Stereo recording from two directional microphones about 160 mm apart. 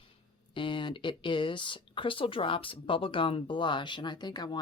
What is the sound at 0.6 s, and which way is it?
Speech, 30° left (ahead or behind).